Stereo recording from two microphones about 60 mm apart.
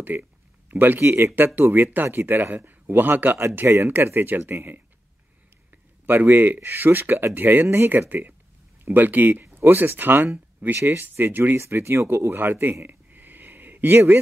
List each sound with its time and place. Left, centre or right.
0.2 s a sound: right
1.0 s speech: right
1.3 s speech: right
3.6 s speech: right
3.9 s speech: right
5.7 s a sound: right
6.3 s speech: right
7.6 s speech: right
8.0 s speech: right
12.8 s a sound: right